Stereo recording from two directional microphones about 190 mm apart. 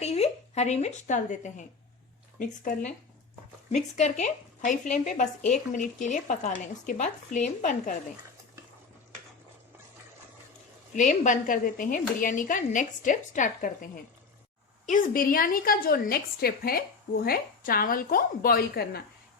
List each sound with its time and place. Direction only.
0.0 s a woman's voice: 35° left (ahead or behind)
3.9 s speech: 40° left (ahead or behind)
10.9 s a woman's voice: 40° left (ahead or behind)